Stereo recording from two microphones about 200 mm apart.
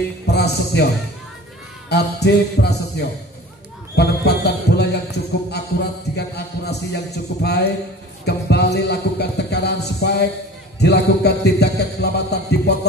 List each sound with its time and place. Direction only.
0.3 s music: 55° left (ahead or behind)
1.9 s music: 55° left (ahead or behind)
3.9 s speech: 55° left (ahead or behind)
5.5 s a sound: 55° left (ahead or behind)
8.3 s music: 55° left (ahead or behind)